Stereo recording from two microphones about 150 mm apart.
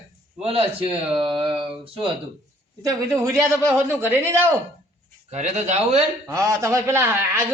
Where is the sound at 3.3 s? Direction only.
20° right (ahead or behind).